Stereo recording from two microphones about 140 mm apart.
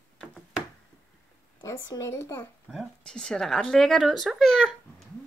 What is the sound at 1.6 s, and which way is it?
Speech, 25° left (ahead or behind).